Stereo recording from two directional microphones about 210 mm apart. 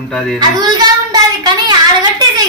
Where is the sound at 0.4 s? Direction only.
20° right (ahead or behind).